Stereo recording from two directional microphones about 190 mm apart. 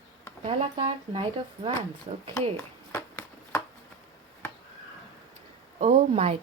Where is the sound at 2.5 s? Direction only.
10° left (ahead or behind).